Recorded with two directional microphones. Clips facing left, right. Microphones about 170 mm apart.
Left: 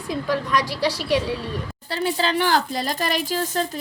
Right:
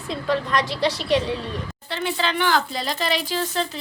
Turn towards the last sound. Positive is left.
turn(degrees=45)  # may be behind; listen again after turning